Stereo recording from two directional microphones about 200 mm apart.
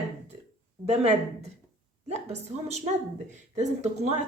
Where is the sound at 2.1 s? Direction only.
35° right (ahead or behind).